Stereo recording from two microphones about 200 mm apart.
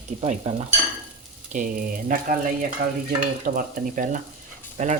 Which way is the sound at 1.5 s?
40° right (ahead or behind).